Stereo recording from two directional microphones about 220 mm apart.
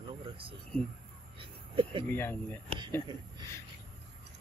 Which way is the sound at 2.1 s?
10° left (ahead or behind).